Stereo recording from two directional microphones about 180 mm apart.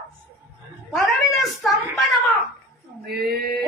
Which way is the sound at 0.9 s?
Centre (ahead or behind).